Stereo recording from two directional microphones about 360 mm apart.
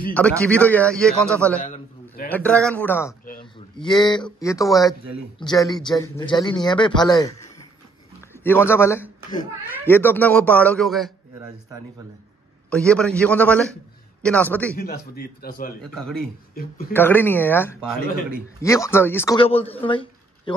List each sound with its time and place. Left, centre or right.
0.1 s a man's voice: centre
12.6 s a man's voice: centre
14.8 s speech: left
15.8 s a man's voice: centre
18.0 s speech: left
18.6 s a man's voice: centre